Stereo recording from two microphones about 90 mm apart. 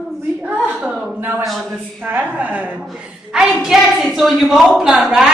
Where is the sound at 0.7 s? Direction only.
5° right (ahead or behind).